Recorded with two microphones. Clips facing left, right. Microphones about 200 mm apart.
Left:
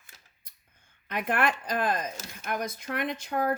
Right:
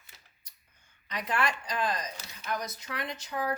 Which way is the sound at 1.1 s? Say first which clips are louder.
Left 4 dB; 55° left (ahead or behind).